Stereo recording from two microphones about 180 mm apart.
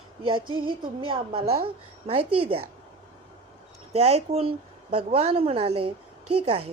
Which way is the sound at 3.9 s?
35° right (ahead or behind).